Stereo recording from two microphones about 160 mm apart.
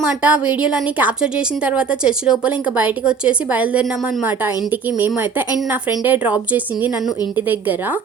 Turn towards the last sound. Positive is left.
turn(degrees=-10)  # may be behind; listen again after turning